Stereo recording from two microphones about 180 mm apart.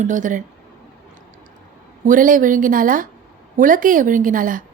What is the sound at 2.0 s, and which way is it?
A woman's voice, 50° right (ahead or behind).